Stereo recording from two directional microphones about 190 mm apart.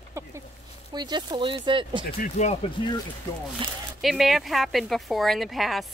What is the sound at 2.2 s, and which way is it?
Speech, 40° left (ahead or behind).